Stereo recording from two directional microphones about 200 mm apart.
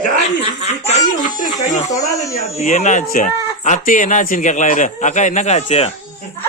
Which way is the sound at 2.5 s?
35° left (ahead or behind).